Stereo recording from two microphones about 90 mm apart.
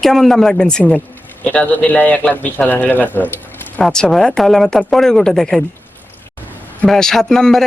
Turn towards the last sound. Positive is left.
turn(degrees=5)  # may be behind; listen again after turning